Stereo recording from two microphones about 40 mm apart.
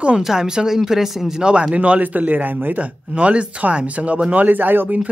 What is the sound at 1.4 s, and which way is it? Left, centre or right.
Speech, right.